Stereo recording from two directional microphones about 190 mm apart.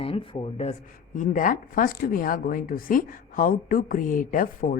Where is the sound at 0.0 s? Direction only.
30° left (ahead or behind).